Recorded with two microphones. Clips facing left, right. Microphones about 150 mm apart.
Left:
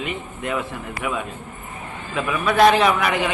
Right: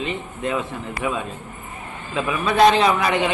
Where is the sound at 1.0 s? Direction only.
30° right (ahead or behind).